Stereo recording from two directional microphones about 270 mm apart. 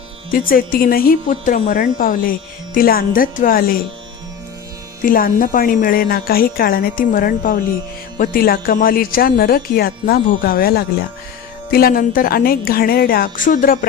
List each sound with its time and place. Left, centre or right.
0.3 s speech: left
5.0 s speech: left